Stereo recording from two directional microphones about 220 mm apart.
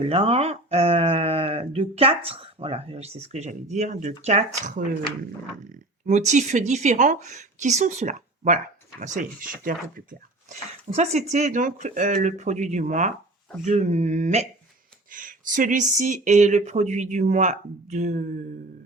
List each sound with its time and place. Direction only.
0.0 s speech: 25° right (ahead or behind)
6.1 s speech: 35° right (ahead or behind)